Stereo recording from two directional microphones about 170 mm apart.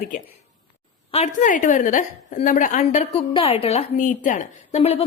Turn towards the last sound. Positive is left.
turn(degrees=35)  # may be behind; listen again after turning